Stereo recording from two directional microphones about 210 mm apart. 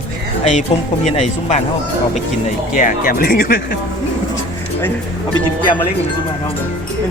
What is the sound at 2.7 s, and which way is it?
Speech, 40° left (ahead or behind).